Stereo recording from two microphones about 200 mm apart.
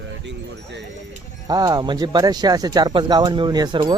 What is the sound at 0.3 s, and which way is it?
Speech, 60° right (ahead or behind).